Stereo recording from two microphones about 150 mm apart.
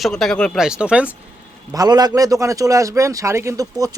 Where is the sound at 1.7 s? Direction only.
25° right (ahead or behind).